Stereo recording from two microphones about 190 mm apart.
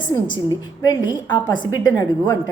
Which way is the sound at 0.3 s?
15° right (ahead or behind).